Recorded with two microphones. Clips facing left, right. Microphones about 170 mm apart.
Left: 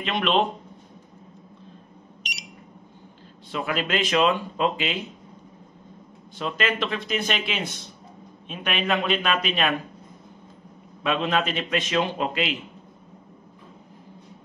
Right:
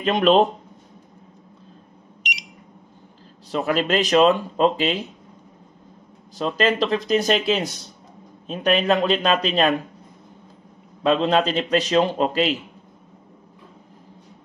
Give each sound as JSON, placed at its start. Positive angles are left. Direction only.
{"t": 0.0, "sound": "speech", "side_deg": -40}
{"t": 3.5, "sound": "a man's voice", "side_deg": -40}
{"t": 6.3, "sound": "a man's voice", "side_deg": -35}
{"t": 11.0, "sound": "a man's voice", "side_deg": -35}